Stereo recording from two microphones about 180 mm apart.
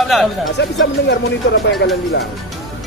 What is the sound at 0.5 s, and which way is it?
Speech, 70° left (ahead or behind).